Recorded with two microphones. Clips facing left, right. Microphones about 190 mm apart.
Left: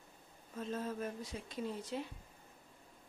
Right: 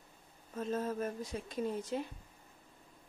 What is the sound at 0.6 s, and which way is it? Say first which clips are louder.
Speech: right 4 dB; 45° right (ahead or behind).